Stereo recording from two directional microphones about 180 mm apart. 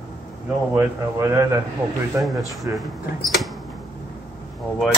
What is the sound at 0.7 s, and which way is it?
A man's voice, 15° right (ahead or behind).